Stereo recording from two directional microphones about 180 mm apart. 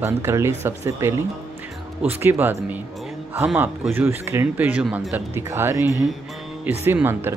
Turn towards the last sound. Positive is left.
turn(degrees=-10)  # may be behind; listen again after turning